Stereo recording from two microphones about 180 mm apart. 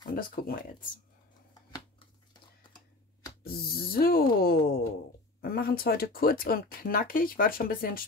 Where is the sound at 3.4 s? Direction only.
55° left (ahead or behind).